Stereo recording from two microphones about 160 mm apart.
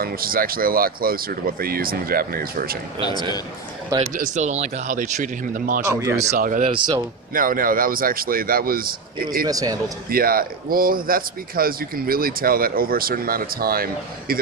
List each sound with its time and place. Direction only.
0.0 s speech: 65° right (ahead or behind)
3.0 s a man's voice: 25° left (ahead or behind)
4.1 s speech: 55° right (ahead or behind)
5.8 s speech: 20° right (ahead or behind)
6.3 s speech: 60° right (ahead or behind)
6.7 s speech: 30° right (ahead or behind)
7.3 s speech: 60° right (ahead or behind)
9.5 s speech: 25° right (ahead or behind)
10.1 s speech: 65° right (ahead or behind)